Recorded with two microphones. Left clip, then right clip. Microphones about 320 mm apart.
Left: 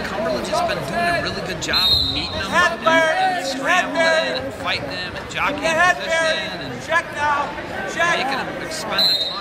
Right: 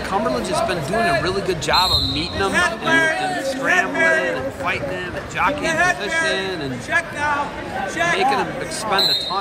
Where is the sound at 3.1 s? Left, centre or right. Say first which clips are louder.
Left 3 dB; left.